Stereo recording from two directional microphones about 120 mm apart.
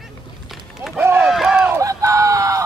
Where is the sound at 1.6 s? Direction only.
25° right (ahead or behind).